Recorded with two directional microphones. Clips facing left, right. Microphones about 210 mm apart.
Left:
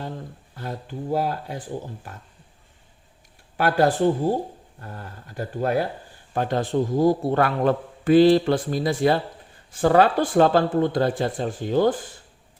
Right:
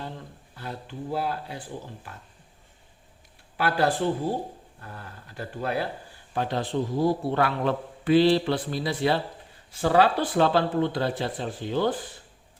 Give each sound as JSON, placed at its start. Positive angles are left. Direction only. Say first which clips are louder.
{"t": 0.5, "sound": "a man's voice", "louder": "left 4 dB", "side_deg": 45}
{"t": 3.6, "sound": "a man's voice", "louder": "left 5 dB", "side_deg": 45}